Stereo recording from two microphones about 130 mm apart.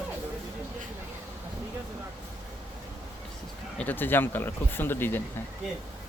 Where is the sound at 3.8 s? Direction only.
15° left (ahead or behind).